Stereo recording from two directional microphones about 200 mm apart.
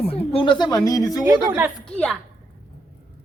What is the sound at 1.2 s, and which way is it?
Speech, 15° right (ahead or behind).